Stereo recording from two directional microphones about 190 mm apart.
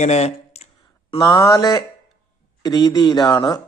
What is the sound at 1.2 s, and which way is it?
A man's voice, 20° left (ahead or behind).